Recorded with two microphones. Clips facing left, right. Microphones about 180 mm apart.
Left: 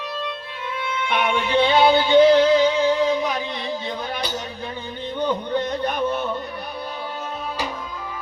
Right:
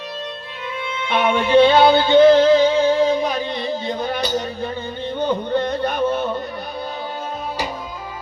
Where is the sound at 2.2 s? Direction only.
45° right (ahead or behind).